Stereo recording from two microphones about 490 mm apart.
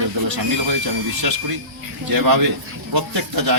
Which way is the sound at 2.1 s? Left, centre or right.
Right.